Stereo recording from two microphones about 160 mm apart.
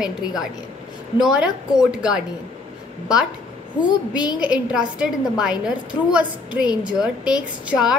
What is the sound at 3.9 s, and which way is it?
Speech, 25° left (ahead or behind).